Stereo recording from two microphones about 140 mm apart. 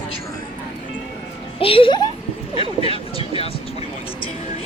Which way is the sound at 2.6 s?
40° left (ahead or behind).